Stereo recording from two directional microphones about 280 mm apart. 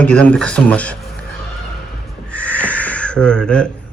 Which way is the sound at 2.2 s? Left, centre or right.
Centre.